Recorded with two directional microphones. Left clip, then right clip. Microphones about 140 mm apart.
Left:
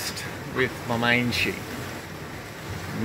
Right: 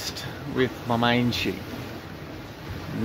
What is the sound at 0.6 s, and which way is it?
Speech, 20° right (ahead or behind).